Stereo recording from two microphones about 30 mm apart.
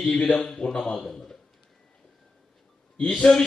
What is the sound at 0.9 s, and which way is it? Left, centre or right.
Music, centre.